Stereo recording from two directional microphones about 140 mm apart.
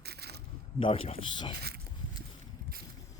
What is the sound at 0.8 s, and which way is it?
Speech, 40° left (ahead or behind).